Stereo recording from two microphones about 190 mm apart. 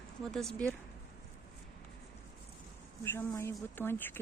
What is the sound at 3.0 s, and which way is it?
Speech, 10° left (ahead or behind).